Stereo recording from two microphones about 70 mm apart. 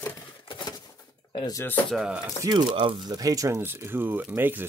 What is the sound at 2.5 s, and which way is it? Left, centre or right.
Speech, right.